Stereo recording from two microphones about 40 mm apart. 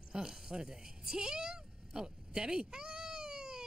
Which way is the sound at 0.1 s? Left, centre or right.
Centre.